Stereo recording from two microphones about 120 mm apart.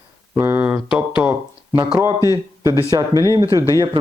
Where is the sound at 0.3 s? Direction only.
20° right (ahead or behind).